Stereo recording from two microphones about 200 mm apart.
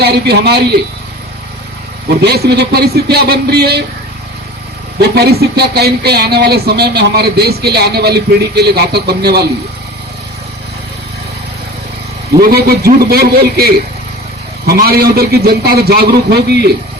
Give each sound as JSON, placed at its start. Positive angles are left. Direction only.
{"t": 0.0, "sound": "speech", "side_deg": -55}
{"t": 2.0, "sound": "speech", "side_deg": -55}
{"t": 4.9, "sound": "speech", "side_deg": -55}
{"t": 12.4, "sound": "speech", "side_deg": -50}